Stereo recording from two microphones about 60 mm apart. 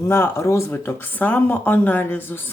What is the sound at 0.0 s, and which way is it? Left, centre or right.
Speech, left.